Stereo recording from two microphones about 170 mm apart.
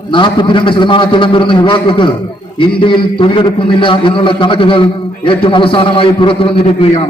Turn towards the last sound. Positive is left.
turn(degrees=35)  # may be behind; listen again after turning